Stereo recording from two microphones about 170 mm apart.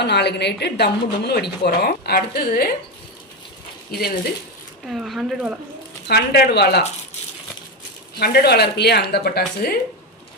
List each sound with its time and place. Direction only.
0.0 s a woman's voice: 80° left; by 2.7 s 60° left (ahead or behind)
4.9 s speech: centre (ahead or behind)
6.1 s a woman's voice: 70° left (ahead or behind)
8.2 s a woman's voice: 70° left (ahead or behind)